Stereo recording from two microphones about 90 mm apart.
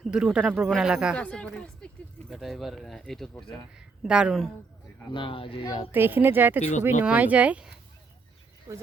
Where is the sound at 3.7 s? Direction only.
10° right (ahead or behind).